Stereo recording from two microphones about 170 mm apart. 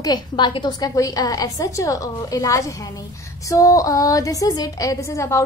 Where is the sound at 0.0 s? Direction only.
25° left (ahead or behind).